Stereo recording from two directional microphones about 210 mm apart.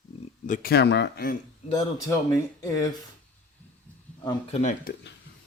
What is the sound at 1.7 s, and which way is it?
Speech, 15° left (ahead or behind).